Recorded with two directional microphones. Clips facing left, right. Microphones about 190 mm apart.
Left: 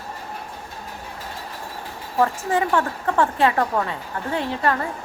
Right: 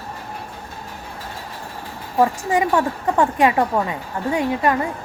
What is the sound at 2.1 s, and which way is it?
A woman's voice, 15° right (ahead or behind).